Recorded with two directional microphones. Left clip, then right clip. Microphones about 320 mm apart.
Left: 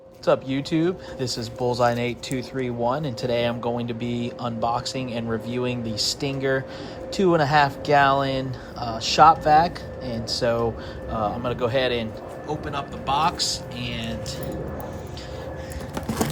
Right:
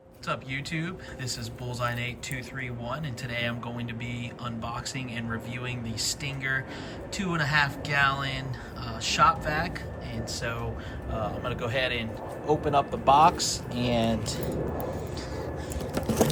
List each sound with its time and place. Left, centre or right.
0.3 s speech: centre
12.5 s speech: centre
13.8 s speech: centre